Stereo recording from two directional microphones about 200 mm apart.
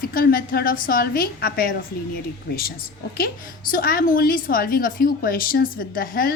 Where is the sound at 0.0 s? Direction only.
45° left (ahead or behind).